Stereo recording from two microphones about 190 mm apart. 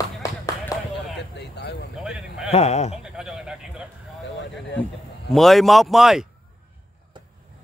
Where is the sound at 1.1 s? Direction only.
60° left (ahead or behind).